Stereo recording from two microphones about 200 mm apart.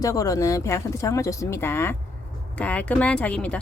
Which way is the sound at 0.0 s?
15° left (ahead or behind).